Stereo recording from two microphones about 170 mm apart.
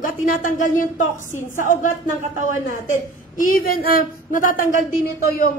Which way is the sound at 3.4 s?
55° left (ahead or behind).